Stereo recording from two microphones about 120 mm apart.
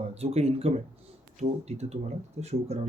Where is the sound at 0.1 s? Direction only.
60° right (ahead or behind).